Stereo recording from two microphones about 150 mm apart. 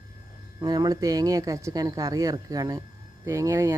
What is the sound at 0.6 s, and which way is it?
Speech, 25° right (ahead or behind).